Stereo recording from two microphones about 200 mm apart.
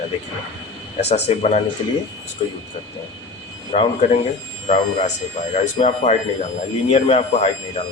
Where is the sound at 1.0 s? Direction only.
35° left (ahead or behind).